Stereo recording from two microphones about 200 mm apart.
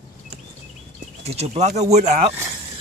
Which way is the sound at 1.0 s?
35° right (ahead or behind).